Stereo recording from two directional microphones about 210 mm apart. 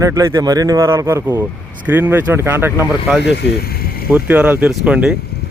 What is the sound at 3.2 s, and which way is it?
Speech, 55° left (ahead or behind).